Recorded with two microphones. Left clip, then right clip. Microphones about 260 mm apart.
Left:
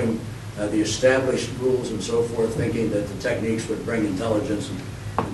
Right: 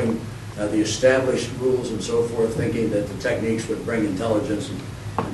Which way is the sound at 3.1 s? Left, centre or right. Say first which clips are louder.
Right 1 dB; centre.